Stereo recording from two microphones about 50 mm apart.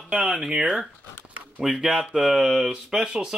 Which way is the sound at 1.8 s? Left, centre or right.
Centre.